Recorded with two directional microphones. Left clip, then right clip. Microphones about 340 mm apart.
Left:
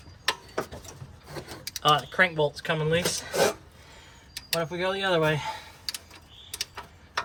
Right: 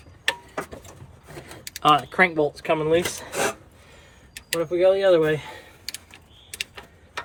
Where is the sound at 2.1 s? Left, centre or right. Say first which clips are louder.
Right 3 dB; centre.